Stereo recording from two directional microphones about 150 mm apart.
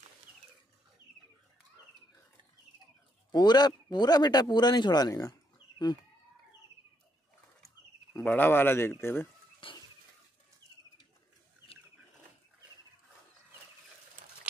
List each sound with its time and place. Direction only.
3.3 s a man's voice: 30° left (ahead or behind)
8.1 s speech: 10° left (ahead or behind)
9.6 s a sound: 35° left (ahead or behind)